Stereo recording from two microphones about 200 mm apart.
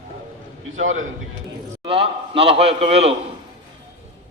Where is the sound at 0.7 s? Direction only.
80° right.